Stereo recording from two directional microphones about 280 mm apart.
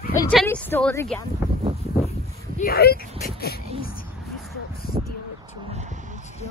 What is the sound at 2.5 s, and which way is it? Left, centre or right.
Speech, left.